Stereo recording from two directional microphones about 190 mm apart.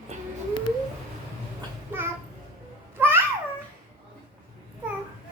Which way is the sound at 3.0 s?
10° right (ahead or behind).